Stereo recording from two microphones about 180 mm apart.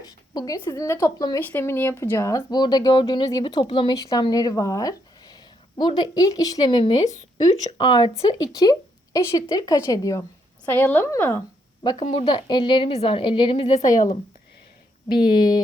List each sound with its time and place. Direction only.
0.0 s a woman's voice: 20° left (ahead or behind)
11.8 s speech: 30° left (ahead or behind)
13.8 s speech: 20° left (ahead or behind)
15.2 s speech: 50° left (ahead or behind)